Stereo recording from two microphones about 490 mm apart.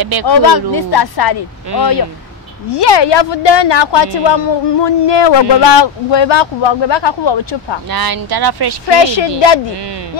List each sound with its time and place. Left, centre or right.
0.0 s speech: right
0.3 s speech: left
2.7 s a woman's voice: left
7.9 s speech: right
8.8 s a woman's voice: left